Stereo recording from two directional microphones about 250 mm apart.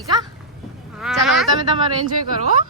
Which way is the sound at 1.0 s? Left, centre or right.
Centre.